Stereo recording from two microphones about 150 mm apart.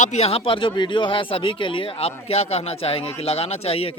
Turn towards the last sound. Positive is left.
turn(degrees=40)  # may be behind; listen again after turning